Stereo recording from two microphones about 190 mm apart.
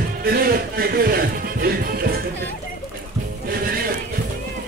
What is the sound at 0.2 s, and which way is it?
Music, 50° right (ahead or behind).